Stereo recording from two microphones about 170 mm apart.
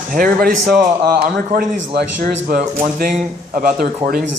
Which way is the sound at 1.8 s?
70° right (ahead or behind).